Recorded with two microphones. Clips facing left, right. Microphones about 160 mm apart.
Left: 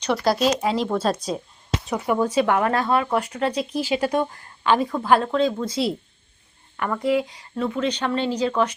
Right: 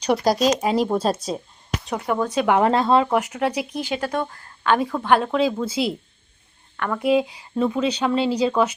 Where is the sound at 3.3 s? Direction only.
10° right (ahead or behind).